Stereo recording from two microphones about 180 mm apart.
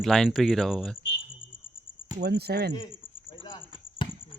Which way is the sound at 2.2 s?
60° right (ahead or behind).